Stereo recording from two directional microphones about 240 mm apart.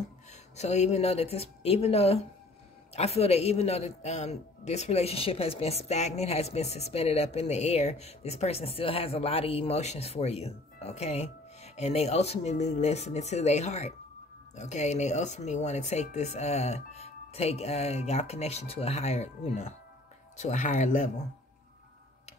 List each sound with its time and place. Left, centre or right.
0.6 s a man's voice: left